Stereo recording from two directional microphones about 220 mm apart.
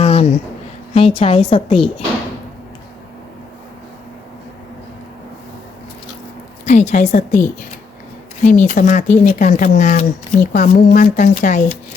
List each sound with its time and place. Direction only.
0.0 s a sound: 30° left (ahead or behind)
0.9 s a woman's voice: 25° left (ahead or behind)
6.7 s speech: 30° left (ahead or behind)
8.4 s speech: 35° left (ahead or behind)